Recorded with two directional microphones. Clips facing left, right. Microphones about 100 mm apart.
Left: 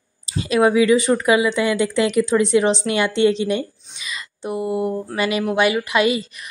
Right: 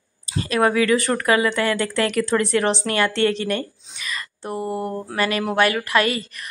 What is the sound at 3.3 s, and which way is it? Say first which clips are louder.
Speech: left 3 dB; 50° right (ahead or behind).